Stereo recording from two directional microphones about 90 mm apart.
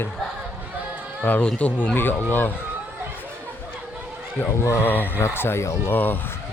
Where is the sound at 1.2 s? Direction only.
20° left (ahead or behind).